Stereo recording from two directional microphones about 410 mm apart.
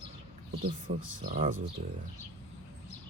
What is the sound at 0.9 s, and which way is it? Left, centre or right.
Speech, right.